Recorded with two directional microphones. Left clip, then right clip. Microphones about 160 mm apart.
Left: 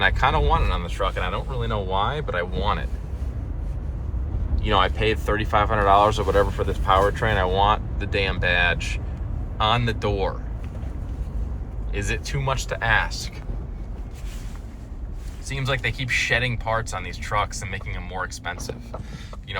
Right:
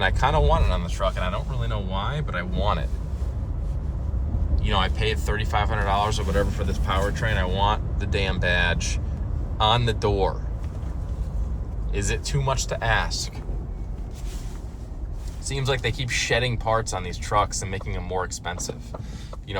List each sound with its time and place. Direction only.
0.0 s speech: 25° right (ahead or behind); by 2.6 s 5° right (ahead or behind)
2.6 s speech: 30° right (ahead or behind)
4.5 s speech: 10° right (ahead or behind)
7.6 s speech: 20° right (ahead or behind)
11.9 s speech: 25° right (ahead or behind)
15.4 s speech: 35° right (ahead or behind)